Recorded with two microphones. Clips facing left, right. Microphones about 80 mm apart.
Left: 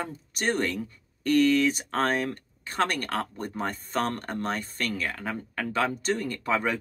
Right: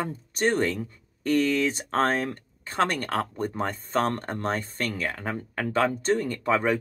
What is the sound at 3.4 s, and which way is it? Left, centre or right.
Speech, right.